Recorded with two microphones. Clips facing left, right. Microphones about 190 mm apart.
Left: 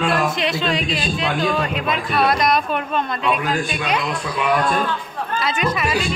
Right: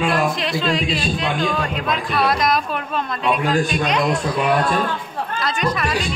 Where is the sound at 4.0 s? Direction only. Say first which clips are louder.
Right 4 dB; 40° right (ahead or behind).